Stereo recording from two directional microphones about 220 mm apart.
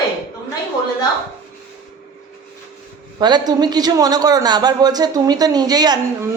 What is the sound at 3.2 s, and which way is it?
A woman's voice, 20° right (ahead or behind).